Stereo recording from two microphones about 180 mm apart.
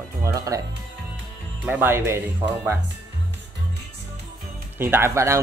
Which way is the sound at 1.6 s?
10° right (ahead or behind).